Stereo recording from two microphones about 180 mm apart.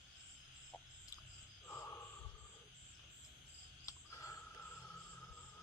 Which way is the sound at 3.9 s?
20° left (ahead or behind).